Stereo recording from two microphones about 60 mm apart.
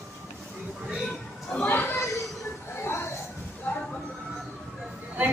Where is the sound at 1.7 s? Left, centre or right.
Left.